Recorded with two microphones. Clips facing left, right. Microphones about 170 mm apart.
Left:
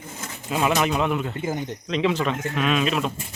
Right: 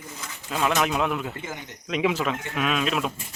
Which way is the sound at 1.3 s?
35° left (ahead or behind).